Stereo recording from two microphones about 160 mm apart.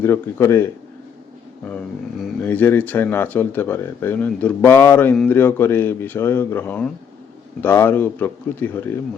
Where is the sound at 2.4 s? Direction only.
10° left (ahead or behind).